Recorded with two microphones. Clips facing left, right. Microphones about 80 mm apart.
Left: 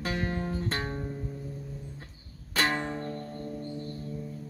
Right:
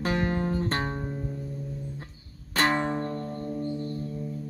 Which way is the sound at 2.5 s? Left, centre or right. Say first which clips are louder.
Right 4 dB; right.